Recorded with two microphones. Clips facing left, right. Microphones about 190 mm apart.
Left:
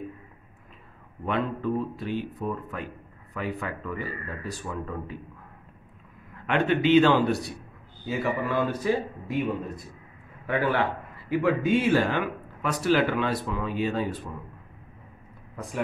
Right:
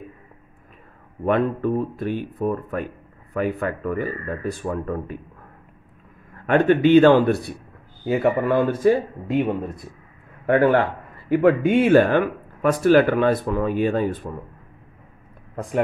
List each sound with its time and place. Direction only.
1.2 s speech: 50° right (ahead or behind)
6.4 s speech: 45° right (ahead or behind)